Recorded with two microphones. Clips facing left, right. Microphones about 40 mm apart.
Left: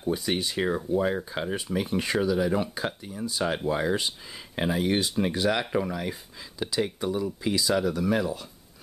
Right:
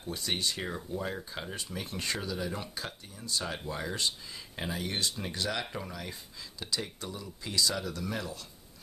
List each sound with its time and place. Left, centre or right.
0.0 s speech: centre
0.6 s speech: left
3.4 s speech: left